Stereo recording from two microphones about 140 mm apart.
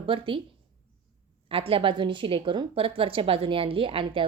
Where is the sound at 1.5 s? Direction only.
40° right (ahead or behind).